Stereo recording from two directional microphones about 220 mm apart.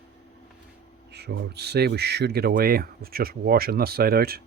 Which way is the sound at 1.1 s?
50° right (ahead or behind).